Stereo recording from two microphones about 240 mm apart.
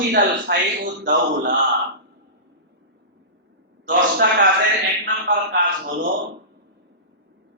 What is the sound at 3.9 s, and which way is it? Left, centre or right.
Speech, right.